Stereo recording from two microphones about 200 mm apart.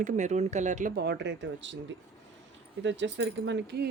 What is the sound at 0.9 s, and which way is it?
Speech, 60° right (ahead or behind).